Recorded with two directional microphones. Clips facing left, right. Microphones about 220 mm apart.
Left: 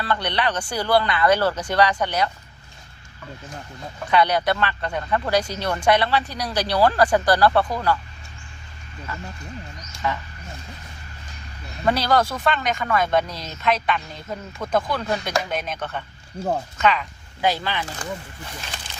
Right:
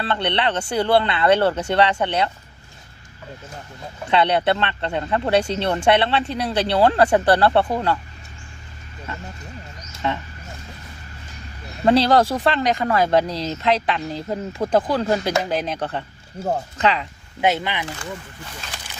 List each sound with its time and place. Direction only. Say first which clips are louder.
0.0 s speech: right 2 dB; 25° right (ahead or behind)
4.1 s speech: right 2 dB; 25° right (ahead or behind)
9.1 s speech: even; 25° right (ahead or behind)
11.9 s speech: right 5 dB; 30° right (ahead or behind)